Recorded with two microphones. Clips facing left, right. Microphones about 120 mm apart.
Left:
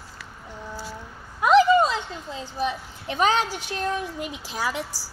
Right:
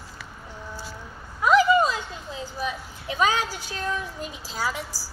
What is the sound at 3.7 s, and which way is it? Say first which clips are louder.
A woman's voice: left 3 dB; 65° left (ahead or behind).